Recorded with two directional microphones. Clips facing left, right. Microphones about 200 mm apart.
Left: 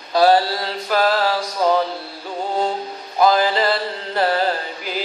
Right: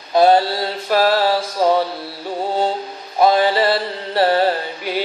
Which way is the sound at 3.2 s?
30° right (ahead or behind).